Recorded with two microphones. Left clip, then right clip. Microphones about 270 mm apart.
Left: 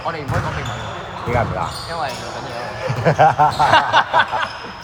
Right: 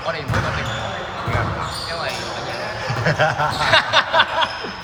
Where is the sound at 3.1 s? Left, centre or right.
Left.